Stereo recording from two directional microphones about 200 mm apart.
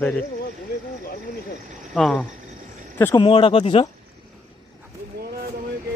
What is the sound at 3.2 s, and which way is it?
Speech, 25° left (ahead or behind).